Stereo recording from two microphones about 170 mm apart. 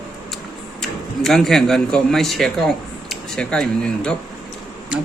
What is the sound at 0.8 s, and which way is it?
Speech, centre (ahead or behind).